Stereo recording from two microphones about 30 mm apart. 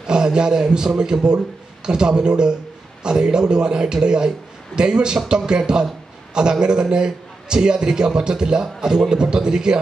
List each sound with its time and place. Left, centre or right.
0.0 s a man's voice: right